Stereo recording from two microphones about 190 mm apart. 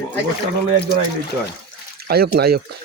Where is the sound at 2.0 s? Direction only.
55° right (ahead or behind).